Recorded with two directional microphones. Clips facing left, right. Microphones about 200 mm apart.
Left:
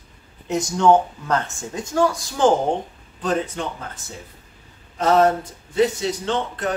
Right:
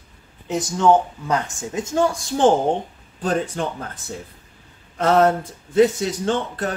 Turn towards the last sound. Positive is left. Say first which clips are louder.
# right 2 dB
turn(degrees=-50)  # may be behind; listen again after turning